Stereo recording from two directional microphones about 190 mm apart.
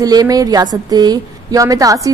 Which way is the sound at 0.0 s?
20° right (ahead or behind).